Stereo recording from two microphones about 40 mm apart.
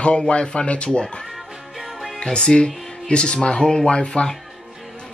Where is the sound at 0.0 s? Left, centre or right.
Left.